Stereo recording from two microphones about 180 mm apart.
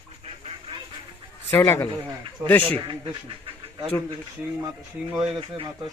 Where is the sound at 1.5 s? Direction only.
15° left (ahead or behind).